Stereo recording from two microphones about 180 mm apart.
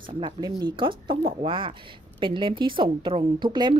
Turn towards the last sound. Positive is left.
turn(degrees=-25)  # may be behind; listen again after turning